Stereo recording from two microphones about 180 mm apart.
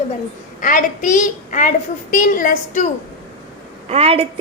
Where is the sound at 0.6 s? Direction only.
45° left (ahead or behind).